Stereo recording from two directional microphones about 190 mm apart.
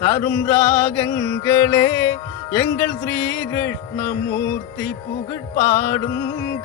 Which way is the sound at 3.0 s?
10° left (ahead or behind).